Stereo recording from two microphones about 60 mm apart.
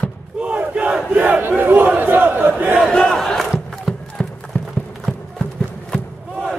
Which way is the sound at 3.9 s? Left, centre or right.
Centre.